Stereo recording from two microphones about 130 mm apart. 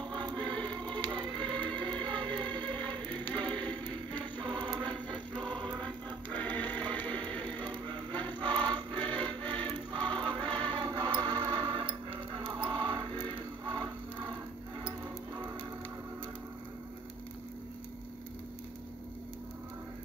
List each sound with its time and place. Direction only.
0.1 s choir: 35° right (ahead or behind)
0.4 s choir: 10° left (ahead or behind)
1.6 s music: 10° left (ahead or behind)
4.6 s choir: 5° left (ahead or behind)
6.3 s music: 10° left (ahead or behind)
10.8 s music: 35° right (ahead or behind)